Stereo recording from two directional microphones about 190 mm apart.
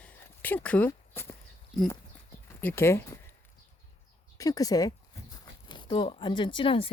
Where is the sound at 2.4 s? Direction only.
10° left (ahead or behind).